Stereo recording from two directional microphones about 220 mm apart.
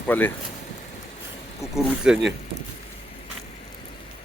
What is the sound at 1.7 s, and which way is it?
Speech, 5° right (ahead or behind).